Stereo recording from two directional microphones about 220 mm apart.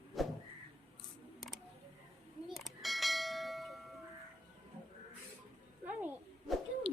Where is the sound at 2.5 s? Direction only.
Centre (ahead or behind).